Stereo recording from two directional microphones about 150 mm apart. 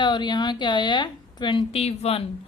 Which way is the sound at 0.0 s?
30° left (ahead or behind).